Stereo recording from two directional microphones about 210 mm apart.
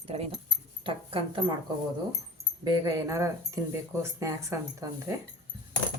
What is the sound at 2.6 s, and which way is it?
Speech, 20° right (ahead or behind).